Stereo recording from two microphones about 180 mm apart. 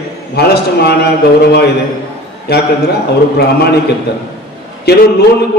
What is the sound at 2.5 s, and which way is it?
Speech, 60° left (ahead or behind).